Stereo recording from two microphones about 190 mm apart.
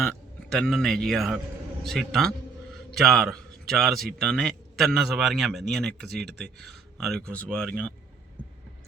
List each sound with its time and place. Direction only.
0.0 s a man's voice: 5° left (ahead or behind)